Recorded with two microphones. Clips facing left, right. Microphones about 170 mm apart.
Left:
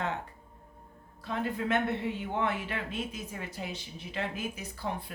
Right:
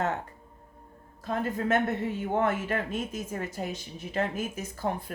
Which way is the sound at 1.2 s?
45° right (ahead or behind).